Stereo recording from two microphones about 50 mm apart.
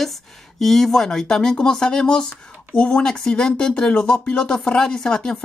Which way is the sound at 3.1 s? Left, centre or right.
Centre.